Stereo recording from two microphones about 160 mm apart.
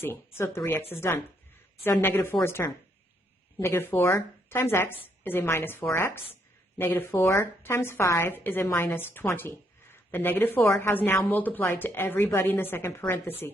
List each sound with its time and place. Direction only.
0.0 s a woman's voice: 15° left (ahead or behind)